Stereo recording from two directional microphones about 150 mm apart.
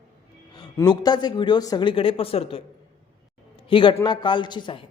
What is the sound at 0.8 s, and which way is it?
A man's voice, 25° left (ahead or behind).